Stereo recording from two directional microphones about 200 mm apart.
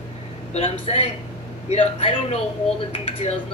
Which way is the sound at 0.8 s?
30° left (ahead or behind).